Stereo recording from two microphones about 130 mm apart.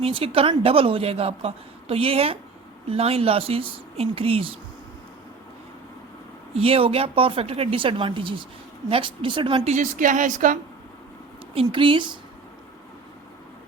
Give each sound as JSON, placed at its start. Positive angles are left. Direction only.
{"t": 0.0, "sound": "a woman's voice", "side_deg": -45}
{"t": 6.6, "sound": "a woman's voice", "side_deg": -45}
{"t": 9.7, "sound": "speech", "side_deg": -80}
{"t": 11.5, "sound": "speech", "side_deg": -40}